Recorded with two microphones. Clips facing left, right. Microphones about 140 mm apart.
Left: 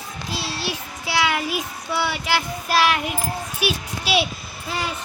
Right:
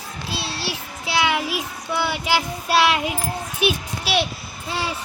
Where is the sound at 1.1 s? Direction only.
5° right (ahead or behind).